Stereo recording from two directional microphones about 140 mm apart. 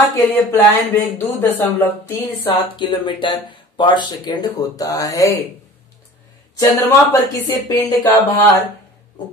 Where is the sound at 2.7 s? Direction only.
35° left (ahead or behind).